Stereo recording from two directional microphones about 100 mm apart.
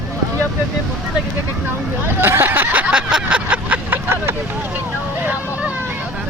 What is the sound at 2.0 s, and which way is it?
Vehicle, 20° right (ahead or behind).